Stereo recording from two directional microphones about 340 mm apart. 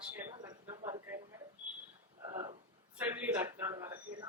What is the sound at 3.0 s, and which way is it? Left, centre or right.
A woman's voice, centre.